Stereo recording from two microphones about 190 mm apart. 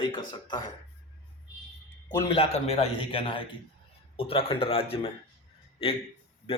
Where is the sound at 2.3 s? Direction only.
30° left (ahead or behind).